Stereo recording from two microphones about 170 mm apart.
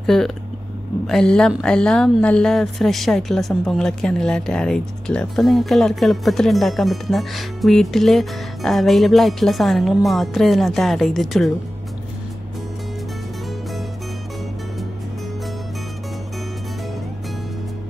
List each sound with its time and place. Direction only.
0.0 s speech: centre (ahead or behind)